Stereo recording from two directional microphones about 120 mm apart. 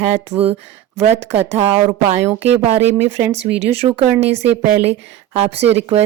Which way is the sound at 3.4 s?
55° right (ahead or behind).